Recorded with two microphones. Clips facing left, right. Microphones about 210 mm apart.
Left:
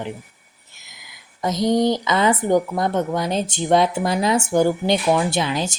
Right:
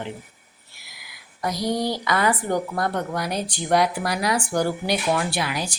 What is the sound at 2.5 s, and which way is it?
Speech, 20° left (ahead or behind).